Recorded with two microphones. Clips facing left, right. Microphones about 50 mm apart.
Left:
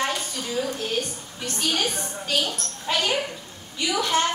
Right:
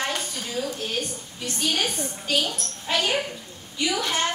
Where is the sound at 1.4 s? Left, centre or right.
Centre.